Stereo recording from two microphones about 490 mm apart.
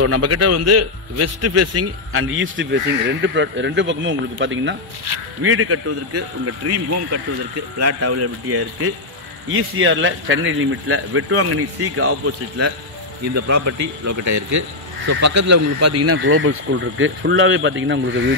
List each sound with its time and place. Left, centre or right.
0.0 s a man's voice: right
13.3 s a man's voice: right